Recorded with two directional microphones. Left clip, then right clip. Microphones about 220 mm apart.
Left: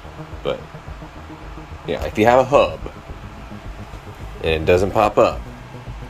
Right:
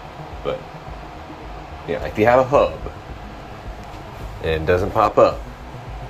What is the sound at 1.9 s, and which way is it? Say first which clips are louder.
Speech: left 1 dB; 25° left (ahead or behind).